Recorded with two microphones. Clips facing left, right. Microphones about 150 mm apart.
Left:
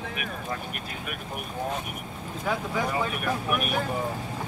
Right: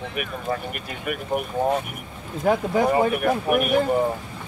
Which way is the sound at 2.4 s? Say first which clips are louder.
Right 9 dB; 50° right (ahead or behind).